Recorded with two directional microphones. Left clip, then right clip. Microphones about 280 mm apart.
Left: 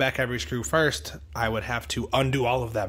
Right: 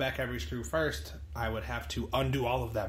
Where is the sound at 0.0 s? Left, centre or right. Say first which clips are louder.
Left 8 dB; left.